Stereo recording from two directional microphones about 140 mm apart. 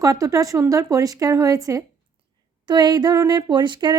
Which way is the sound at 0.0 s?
25° right (ahead or behind).